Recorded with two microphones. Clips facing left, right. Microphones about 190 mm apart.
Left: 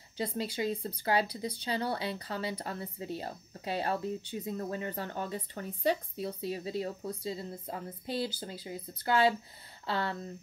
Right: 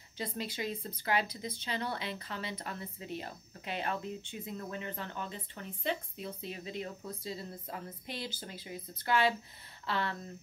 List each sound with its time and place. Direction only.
0.2 s speech: 30° left (ahead or behind)